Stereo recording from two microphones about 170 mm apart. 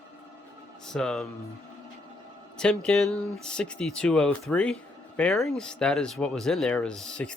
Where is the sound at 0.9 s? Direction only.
5° left (ahead or behind).